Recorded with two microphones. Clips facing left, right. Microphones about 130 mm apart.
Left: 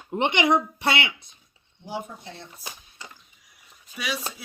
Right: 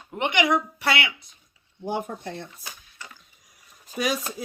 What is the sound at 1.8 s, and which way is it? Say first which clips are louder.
Speech: right 5 dB; 55° right (ahead or behind).